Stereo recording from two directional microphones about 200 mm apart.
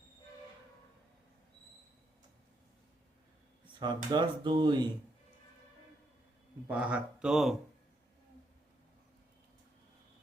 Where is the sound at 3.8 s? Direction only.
25° right (ahead or behind).